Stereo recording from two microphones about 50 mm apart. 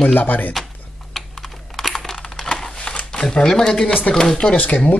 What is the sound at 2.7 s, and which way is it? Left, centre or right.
Shuffling cards, centre.